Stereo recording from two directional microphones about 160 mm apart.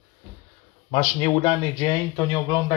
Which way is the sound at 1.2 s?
30° left (ahead or behind).